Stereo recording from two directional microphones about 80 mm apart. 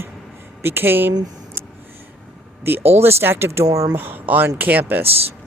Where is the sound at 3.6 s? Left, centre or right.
Right.